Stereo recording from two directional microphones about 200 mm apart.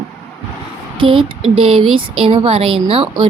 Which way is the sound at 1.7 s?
90° right.